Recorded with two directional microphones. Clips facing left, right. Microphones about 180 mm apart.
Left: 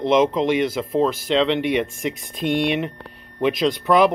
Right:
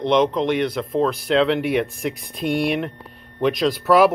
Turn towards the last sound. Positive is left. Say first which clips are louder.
# right 1 dB
turn(degrees=-5)  # may be behind; listen again after turning